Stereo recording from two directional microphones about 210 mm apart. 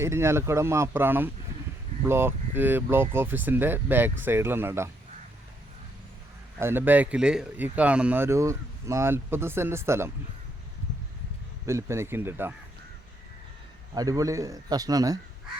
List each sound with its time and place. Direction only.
0.0 s speech: 10° right (ahead or behind)
6.6 s speech: 10° right (ahead or behind)
11.6 s speech: 15° right (ahead or behind)
13.9 s speech: 15° right (ahead or behind)